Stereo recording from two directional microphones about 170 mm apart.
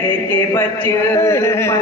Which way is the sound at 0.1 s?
15° left (ahead or behind).